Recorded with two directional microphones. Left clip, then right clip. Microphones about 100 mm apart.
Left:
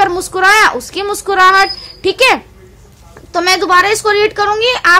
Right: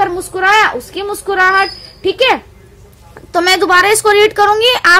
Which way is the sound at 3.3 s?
25° right (ahead or behind).